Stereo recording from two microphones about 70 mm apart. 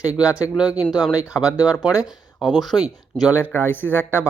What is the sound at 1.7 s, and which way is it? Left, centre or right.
Speech, centre.